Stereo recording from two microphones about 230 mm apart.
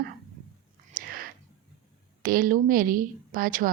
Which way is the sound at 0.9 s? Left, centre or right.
Right.